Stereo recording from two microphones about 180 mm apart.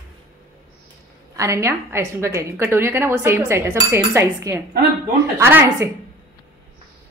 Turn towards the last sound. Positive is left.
turn(degrees=-15)  # may be behind; listen again after turning